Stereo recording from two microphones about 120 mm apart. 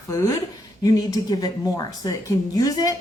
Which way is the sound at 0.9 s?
30° left (ahead or behind).